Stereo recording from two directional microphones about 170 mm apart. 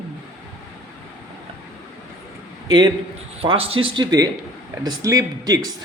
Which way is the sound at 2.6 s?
25° right (ahead or behind).